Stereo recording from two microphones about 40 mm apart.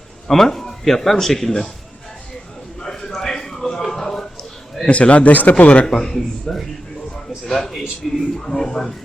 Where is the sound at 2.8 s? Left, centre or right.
Centre.